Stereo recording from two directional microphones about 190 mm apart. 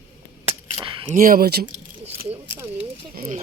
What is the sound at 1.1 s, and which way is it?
Speech, 50° right (ahead or behind).